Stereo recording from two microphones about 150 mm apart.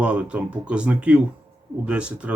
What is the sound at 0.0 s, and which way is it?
Speech, 10° right (ahead or behind).